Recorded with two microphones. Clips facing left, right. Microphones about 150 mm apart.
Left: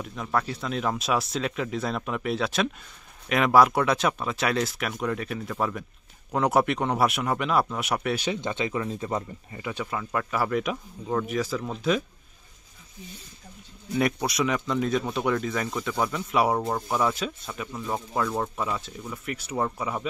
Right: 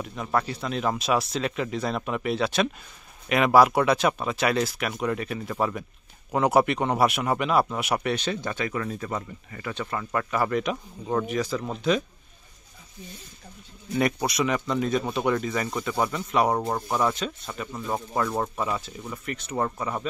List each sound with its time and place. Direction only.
0.0 s speech: 5° right (ahead or behind)
8.2 s speech: 20° left (ahead or behind)
9.7 s speech: 10° left (ahead or behind)
13.9 s speech: centre (ahead or behind)